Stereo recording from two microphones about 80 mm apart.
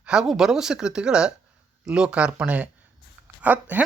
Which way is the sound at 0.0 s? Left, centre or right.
Centre.